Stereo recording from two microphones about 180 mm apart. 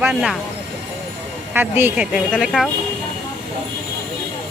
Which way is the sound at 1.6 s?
10° right (ahead or behind).